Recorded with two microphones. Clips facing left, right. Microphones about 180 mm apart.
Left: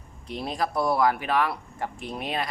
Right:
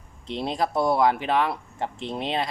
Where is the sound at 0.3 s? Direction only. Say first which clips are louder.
Right 3 dB; 25° right (ahead or behind).